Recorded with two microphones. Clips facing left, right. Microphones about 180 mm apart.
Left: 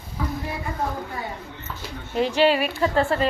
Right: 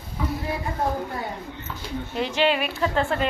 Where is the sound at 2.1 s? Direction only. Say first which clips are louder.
Left 4 dB; 40° left (ahead or behind).